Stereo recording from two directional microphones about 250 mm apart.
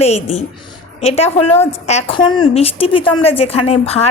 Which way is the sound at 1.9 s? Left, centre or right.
Left.